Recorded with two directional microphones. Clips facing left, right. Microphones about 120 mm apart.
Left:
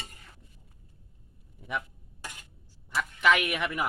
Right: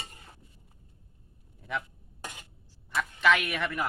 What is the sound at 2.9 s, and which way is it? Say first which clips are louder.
Speech: even; 10° left (ahead or behind).